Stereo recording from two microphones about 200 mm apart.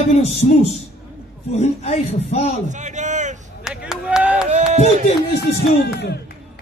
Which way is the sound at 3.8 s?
5° right (ahead or behind).